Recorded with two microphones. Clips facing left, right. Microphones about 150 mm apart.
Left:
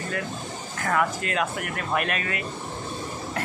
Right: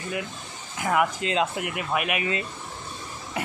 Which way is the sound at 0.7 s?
15° right (ahead or behind).